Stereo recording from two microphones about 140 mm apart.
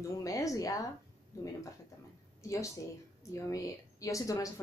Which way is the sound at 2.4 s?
20° left (ahead or behind).